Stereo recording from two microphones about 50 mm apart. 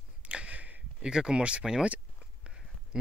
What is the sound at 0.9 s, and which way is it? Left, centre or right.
Speech, centre.